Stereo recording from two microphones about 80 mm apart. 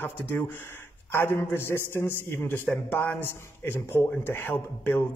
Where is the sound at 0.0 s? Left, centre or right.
Left.